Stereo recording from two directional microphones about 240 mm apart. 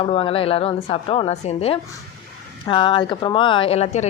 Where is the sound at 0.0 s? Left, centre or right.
Left.